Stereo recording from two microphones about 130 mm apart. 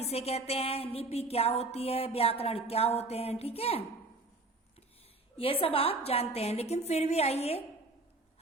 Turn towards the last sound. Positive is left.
turn(degrees=55)  # may be behind; listen again after turning